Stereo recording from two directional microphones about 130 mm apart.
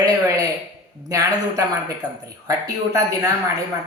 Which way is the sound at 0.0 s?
25° right (ahead or behind).